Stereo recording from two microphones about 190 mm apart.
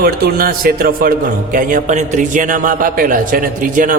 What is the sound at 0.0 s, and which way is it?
A man's voice, 50° right (ahead or behind).